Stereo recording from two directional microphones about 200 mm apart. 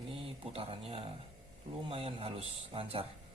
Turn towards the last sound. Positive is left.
turn(degrees=-25)  # may be behind; listen again after turning